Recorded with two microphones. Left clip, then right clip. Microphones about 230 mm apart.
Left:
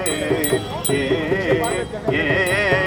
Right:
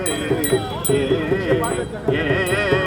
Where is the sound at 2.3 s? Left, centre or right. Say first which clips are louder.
Left 3 dB; left.